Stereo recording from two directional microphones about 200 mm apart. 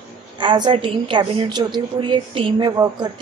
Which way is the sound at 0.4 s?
25° right (ahead or behind).